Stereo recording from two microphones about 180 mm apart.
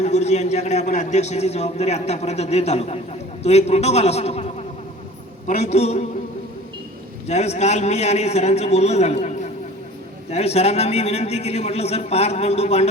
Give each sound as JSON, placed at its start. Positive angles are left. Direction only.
{"t": 0.0, "sound": "a man's voice", "side_deg": 35}
{"t": 7.3, "sound": "a man's voice", "side_deg": 35}